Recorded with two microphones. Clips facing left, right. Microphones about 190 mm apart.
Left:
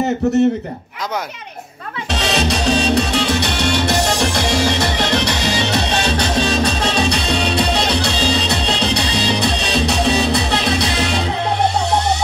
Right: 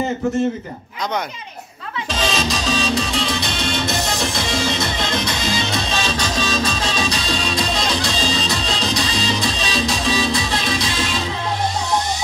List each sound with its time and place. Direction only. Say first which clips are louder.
2.0 s music: left 3 dB; 65° left (ahead or behind)